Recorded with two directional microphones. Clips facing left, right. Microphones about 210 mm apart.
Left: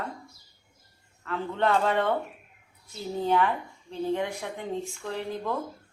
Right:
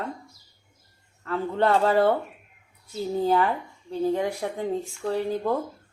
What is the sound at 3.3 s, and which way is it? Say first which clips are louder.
Speech: even; 35° right (ahead or behind).